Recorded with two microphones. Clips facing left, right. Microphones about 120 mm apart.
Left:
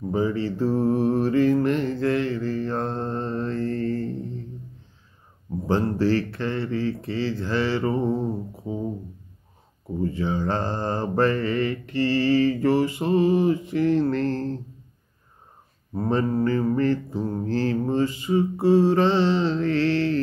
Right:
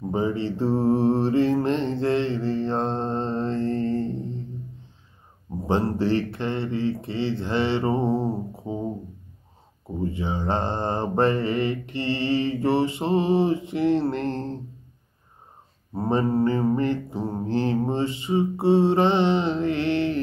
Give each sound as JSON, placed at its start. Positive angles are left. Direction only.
{"t": 0.1, "sound": "mantra", "side_deg": -25}
{"t": 5.9, "sound": "mantra", "side_deg": -20}
{"t": 10.1, "sound": "mantra", "side_deg": -20}
{"t": 16.1, "sound": "mantra", "side_deg": -20}